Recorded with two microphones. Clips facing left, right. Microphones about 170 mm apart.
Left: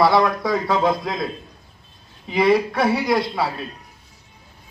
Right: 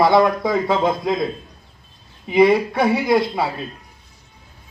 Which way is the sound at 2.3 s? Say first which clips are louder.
Right 3 dB; 25° right (ahead or behind).